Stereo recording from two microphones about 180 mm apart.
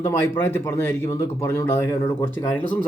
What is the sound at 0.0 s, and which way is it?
Speech, 15° left (ahead or behind).